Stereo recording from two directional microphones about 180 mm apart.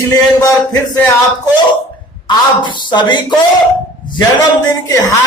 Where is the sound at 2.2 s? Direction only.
25° left (ahead or behind).